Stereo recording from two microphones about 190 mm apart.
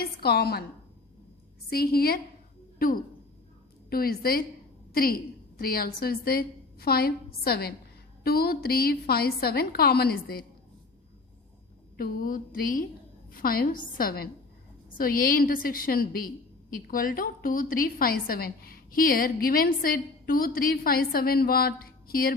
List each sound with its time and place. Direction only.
0.0 s a woman's voice: 55° left (ahead or behind)
1.7 s a woman's voice: 55° left (ahead or behind)
11.9 s a woman's voice: 45° left (ahead or behind)